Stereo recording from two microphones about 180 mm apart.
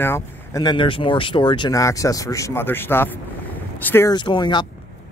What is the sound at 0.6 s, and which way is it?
Speech, 30° left (ahead or behind).